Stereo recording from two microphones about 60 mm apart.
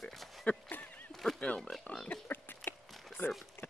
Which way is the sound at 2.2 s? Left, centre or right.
Left.